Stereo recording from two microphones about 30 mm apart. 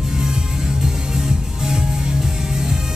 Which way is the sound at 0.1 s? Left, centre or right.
Right.